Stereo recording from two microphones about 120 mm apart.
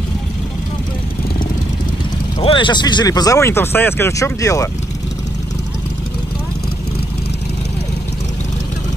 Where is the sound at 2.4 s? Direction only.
45° left (ahead or behind); by 4.7 s 25° left (ahead or behind).